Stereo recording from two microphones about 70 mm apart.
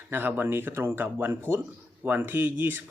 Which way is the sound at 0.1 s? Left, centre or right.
Right.